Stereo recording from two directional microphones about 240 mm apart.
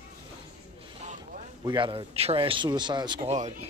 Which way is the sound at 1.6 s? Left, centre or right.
Centre.